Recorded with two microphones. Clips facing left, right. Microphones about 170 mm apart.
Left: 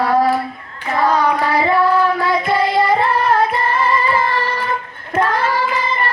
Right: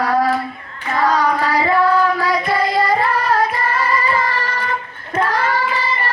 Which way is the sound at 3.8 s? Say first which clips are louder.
Left 2 dB; 25° left (ahead or behind).